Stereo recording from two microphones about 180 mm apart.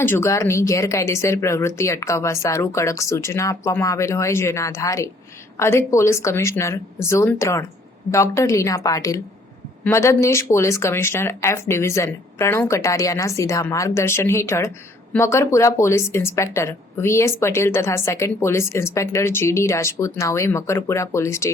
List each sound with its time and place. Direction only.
0.0 s speech: 15° left (ahead or behind)